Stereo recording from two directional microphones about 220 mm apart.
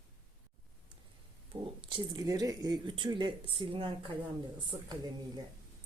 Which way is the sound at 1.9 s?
20° right (ahead or behind).